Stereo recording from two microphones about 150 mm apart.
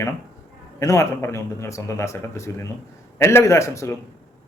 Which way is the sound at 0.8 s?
20° left (ahead or behind).